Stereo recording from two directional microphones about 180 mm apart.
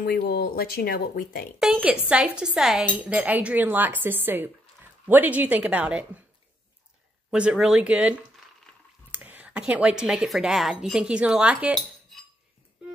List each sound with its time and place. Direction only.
0.0 s speech: 55° left (ahead or behind)
1.6 s a woman's voice: 5° right (ahead or behind)
7.2 s a woman's voice: 5° right (ahead or behind)